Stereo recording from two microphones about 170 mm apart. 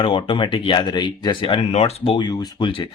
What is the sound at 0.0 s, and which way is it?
Speech, 30° left (ahead or behind).